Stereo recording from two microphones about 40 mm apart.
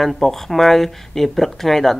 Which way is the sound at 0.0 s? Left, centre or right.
Centre.